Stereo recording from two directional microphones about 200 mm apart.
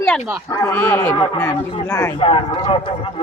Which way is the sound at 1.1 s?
25° left (ahead or behind).